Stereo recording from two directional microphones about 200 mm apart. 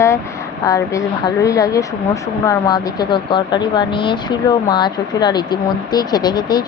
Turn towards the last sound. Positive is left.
turn(degrees=20)  # may be behind; listen again after turning